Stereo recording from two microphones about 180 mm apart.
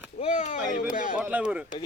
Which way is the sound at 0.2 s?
40° left (ahead or behind).